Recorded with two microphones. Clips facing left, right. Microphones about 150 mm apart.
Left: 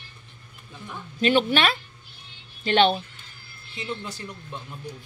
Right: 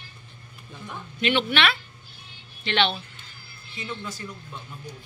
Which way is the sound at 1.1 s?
40° left (ahead or behind).